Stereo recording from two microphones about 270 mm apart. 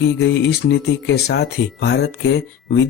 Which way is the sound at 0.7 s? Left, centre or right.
Left.